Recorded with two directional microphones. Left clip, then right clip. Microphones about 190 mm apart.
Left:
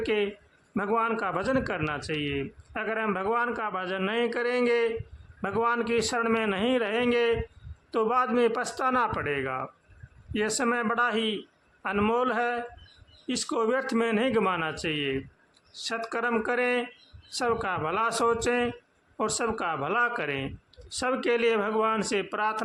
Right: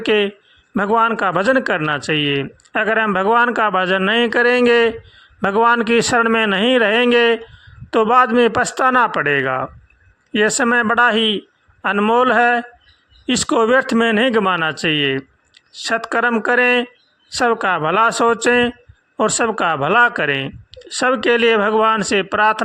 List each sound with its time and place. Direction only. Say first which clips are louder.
0.0 s a man's voice: right 11 dB; 35° right (ahead or behind)